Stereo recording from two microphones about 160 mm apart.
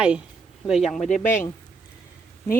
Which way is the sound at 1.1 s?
50° left (ahead or behind).